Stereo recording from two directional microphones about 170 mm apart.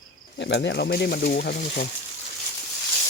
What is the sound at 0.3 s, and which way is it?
Speech, 90° left.